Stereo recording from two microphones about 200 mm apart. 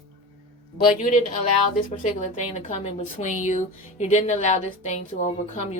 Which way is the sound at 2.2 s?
35° left (ahead or behind).